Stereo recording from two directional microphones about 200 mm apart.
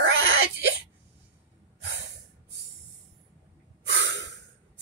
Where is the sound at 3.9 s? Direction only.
60° right (ahead or behind).